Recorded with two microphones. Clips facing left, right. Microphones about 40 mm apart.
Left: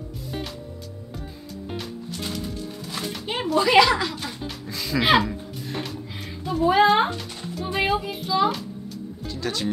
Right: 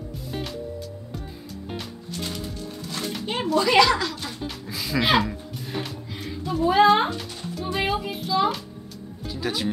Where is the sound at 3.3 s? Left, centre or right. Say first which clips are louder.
Left 1 dB; centre.